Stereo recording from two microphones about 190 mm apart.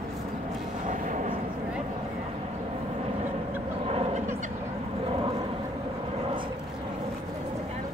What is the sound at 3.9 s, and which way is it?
Vehicle, 30° right (ahead or behind).